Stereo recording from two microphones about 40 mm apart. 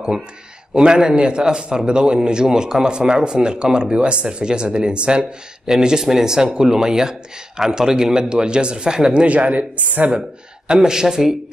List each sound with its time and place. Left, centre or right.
0.7 s speech: right
5.7 s speech: centre
9.2 s speech: right
10.7 s speech: centre